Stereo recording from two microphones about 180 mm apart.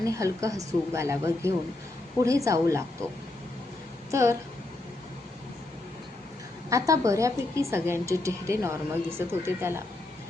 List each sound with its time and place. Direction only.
0.0 s speech: 15° right (ahead or behind)
4.1 s speech: 15° right (ahead or behind)
6.7 s speech: 15° right (ahead or behind)